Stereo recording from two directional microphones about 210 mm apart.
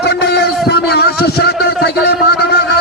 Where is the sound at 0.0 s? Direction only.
55° left (ahead or behind).